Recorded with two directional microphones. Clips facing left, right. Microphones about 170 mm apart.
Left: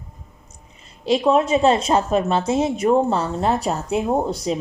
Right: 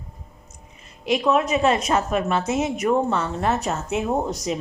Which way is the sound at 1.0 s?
30° left (ahead or behind).